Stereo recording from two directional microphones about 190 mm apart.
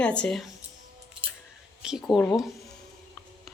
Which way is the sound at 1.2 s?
25° right (ahead or behind).